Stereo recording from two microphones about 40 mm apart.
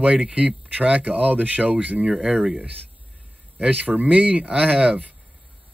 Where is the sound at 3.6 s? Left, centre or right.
Right.